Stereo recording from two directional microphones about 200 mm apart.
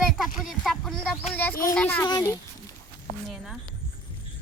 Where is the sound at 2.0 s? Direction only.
20° left (ahead or behind).